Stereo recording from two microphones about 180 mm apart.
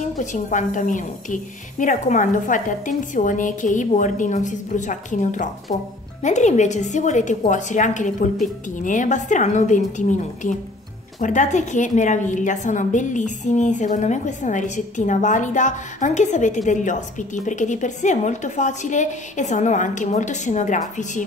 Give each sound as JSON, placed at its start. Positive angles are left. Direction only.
{"t": 0.2, "sound": "a woman's voice", "side_deg": 45}